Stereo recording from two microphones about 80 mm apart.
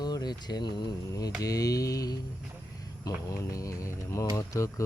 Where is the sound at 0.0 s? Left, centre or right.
Left.